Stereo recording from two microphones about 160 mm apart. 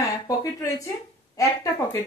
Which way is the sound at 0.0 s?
20° left (ahead or behind).